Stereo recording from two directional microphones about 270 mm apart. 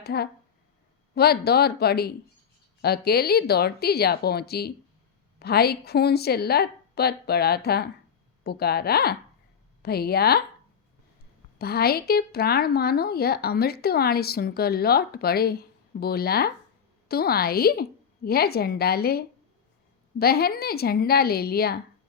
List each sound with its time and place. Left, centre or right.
0.0 s speech: left
11.5 s speech: left